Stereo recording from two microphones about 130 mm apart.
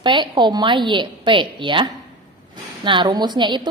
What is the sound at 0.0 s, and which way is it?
A woman's voice, 35° right (ahead or behind).